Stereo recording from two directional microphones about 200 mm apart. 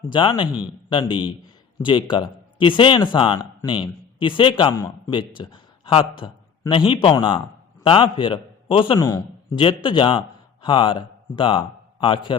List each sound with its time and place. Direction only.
0.1 s a man's voice: 25° left (ahead or behind)